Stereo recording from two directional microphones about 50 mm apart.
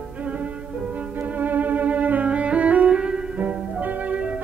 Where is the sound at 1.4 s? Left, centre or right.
Right; by 3.5 s centre.